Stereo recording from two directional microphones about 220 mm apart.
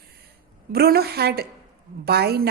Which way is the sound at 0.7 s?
45° right (ahead or behind).